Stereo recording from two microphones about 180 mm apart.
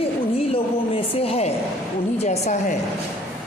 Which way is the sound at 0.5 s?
30° left (ahead or behind).